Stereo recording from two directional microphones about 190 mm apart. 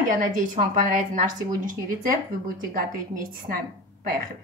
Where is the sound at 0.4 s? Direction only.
45° right (ahead or behind).